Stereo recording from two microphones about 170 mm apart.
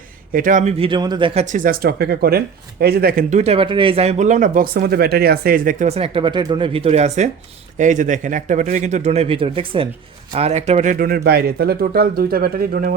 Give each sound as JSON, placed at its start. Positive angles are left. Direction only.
{"t": 0.3, "sound": "a man's voice", "side_deg": -50}
{"t": 0.8, "sound": "a man's voice", "side_deg": -25}
{"t": 1.3, "sound": "a man's voice", "side_deg": -40}
{"t": 5.9, "sound": "a man's voice", "side_deg": -30}
{"t": 10.9, "sound": "speech", "side_deg": -60}